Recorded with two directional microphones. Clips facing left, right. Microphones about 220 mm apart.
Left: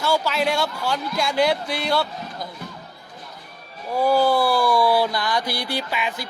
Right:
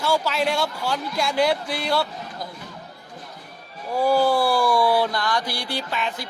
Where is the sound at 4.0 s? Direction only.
5° right (ahead or behind).